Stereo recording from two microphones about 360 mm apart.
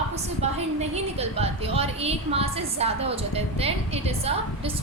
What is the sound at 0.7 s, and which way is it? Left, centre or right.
Speech, centre.